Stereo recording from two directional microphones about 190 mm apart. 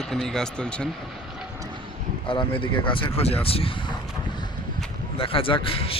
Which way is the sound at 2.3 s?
25° left (ahead or behind).